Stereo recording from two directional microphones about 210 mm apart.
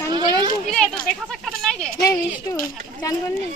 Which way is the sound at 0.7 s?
5° left (ahead or behind).